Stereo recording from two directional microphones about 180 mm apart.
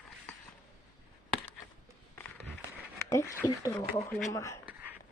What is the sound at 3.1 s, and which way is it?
Speech, 15° left (ahead or behind).